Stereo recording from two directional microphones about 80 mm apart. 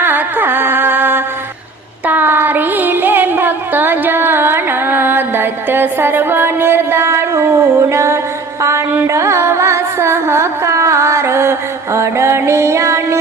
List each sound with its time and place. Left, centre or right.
0.0 s music: right